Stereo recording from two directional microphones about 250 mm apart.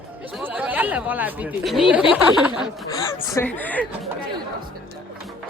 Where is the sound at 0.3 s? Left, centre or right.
Centre.